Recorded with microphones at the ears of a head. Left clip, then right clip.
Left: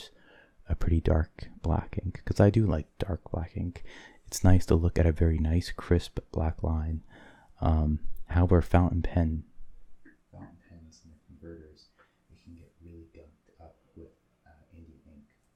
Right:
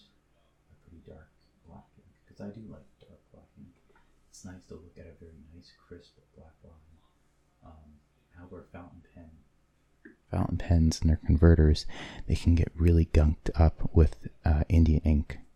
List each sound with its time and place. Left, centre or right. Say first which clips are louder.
0.0 s speech: left 15 dB; left
10.0 s speech: right 16 dB; right